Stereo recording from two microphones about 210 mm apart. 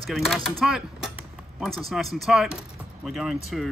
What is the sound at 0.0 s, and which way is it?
Speech, centre (ahead or behind).